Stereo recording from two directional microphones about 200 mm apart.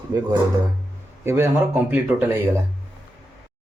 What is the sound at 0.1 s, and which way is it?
Speech, 20° right (ahead or behind).